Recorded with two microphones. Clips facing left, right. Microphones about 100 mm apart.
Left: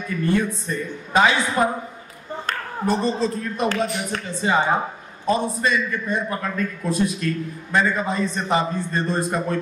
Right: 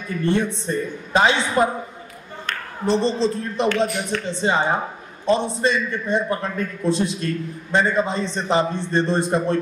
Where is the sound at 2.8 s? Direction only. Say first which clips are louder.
Right 2 dB; 25° right (ahead or behind).